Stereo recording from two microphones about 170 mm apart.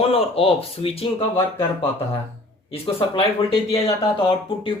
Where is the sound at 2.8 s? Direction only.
30° left (ahead or behind).